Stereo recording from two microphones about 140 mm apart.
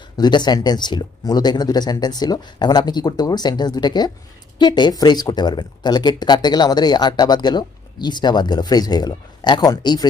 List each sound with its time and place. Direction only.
0.2 s speech: 30° left (ahead or behind)